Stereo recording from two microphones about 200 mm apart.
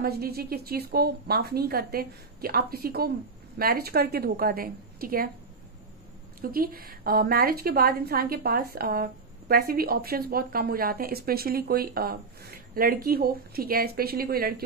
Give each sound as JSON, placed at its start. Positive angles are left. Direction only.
{"t": 0.0, "sound": "a woman's voice", "side_deg": -50}
{"t": 6.4, "sound": "a woman's voice", "side_deg": -45}